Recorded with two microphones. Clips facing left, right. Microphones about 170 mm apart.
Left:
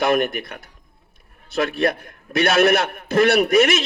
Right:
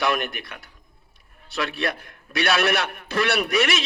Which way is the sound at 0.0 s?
50° left (ahead or behind).